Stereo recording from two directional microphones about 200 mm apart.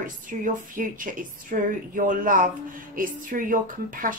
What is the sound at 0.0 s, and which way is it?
A woman's voice, 40° right (ahead or behind).